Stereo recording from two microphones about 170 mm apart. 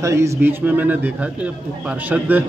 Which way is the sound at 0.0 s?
15° right (ahead or behind).